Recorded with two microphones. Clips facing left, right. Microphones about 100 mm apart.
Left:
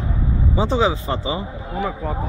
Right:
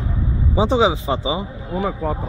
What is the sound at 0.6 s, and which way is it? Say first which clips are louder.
Speech: right 3 dB; 15° right (ahead or behind).